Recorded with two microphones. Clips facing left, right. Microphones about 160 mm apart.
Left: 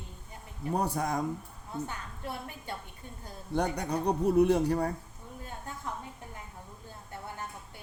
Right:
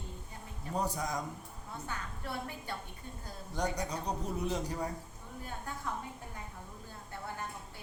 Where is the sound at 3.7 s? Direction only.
60° left (ahead or behind).